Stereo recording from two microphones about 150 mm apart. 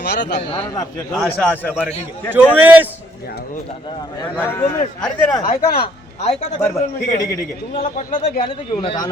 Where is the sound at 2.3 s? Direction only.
15° right (ahead or behind).